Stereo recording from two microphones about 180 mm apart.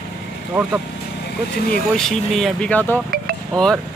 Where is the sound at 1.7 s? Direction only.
5° left (ahead or behind).